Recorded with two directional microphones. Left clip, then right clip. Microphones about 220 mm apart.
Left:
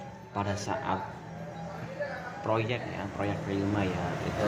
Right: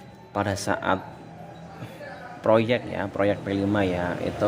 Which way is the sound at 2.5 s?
55° right (ahead or behind).